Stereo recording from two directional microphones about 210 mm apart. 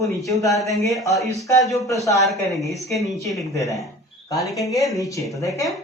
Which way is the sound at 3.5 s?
15° left (ahead or behind).